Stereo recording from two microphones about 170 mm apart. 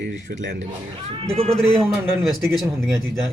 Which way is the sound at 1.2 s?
35° right (ahead or behind).